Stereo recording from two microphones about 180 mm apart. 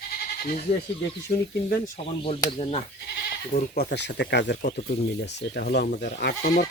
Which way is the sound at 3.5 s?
50° left (ahead or behind).